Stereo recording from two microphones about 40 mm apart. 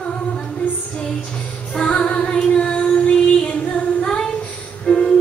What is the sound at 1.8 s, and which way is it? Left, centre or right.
Child singing, left.